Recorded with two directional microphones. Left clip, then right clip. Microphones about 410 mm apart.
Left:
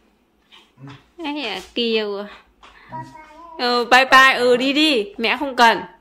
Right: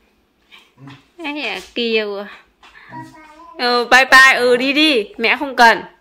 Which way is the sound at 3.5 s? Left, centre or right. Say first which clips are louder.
Right 3 dB; centre.